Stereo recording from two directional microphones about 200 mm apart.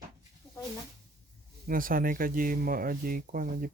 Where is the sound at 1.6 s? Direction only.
45° right (ahead or behind).